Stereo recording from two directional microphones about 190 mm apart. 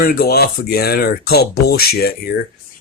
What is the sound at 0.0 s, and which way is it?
Speech, 55° left (ahead or behind).